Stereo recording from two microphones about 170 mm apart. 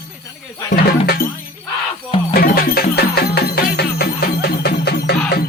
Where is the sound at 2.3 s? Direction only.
60° left (ahead or behind).